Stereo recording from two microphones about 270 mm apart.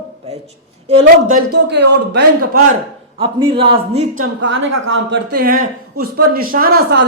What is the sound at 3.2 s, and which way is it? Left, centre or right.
Speech, centre.